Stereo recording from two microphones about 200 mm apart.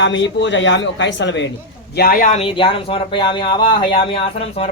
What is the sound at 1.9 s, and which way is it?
Speech, 45° left (ahead or behind).